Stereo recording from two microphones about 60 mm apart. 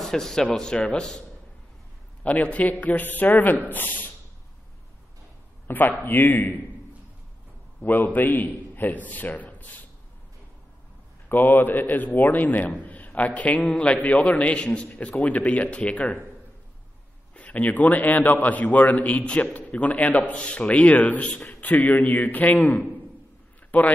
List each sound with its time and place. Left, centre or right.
0.0 s a man's voice: centre
2.2 s a man's voice: left
5.7 s a man's voice: left
7.8 s a man's voice: left
11.2 s a man's voice: left
17.4 s a man's voice: left